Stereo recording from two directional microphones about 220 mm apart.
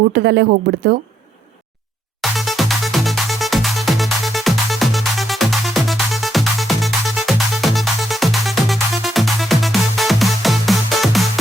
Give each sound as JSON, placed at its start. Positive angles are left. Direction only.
{"t": 0.1, "sound": "speech", "side_deg": -45}
{"t": 2.3, "sound": "music", "side_deg": 0}